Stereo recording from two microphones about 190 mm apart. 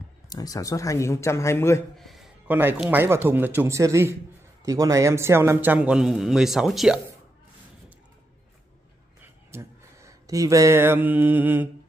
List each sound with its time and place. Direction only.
0.3 s a man's voice: 20° left (ahead or behind)
2.0 s a man's voice: centre (ahead or behind)
9.2 s speech: 15° right (ahead or behind)